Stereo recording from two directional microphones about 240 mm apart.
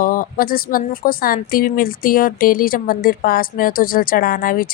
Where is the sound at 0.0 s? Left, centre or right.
Left.